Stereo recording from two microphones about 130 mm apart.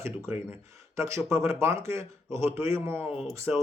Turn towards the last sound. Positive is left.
turn(degrees=-10)  # may be behind; listen again after turning